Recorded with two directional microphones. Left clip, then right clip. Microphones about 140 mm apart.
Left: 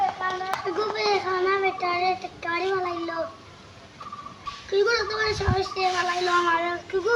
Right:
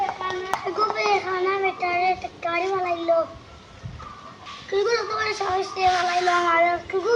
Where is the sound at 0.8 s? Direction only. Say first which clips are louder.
Right 3 dB; 15° left (ahead or behind).